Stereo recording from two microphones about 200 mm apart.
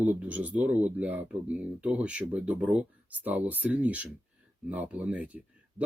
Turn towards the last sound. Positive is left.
turn(degrees=-5)  # may be behind; listen again after turning